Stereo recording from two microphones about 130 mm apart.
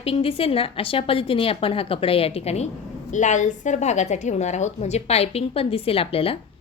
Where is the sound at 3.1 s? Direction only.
70° left (ahead or behind).